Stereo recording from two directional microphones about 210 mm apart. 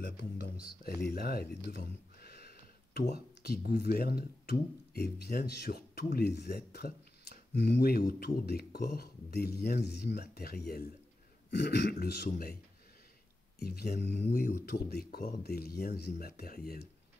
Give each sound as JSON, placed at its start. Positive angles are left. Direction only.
{"t": 0.0, "sound": "speech", "side_deg": 50}
{"t": 13.6, "sound": "speech", "side_deg": 50}